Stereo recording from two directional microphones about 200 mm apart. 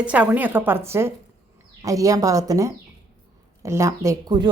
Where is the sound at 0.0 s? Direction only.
5° right (ahead or behind).